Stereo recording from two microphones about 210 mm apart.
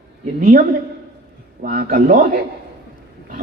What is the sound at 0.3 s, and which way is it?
Speech, 40° right (ahead or behind).